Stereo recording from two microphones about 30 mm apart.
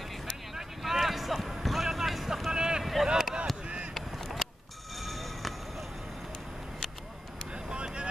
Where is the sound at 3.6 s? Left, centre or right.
Right.